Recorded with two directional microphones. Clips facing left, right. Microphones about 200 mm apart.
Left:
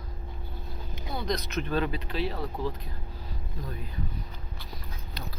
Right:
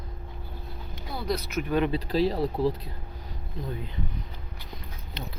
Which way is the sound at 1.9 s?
35° right (ahead or behind).